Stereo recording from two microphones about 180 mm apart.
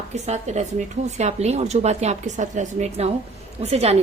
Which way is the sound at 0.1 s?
40° right (ahead or behind).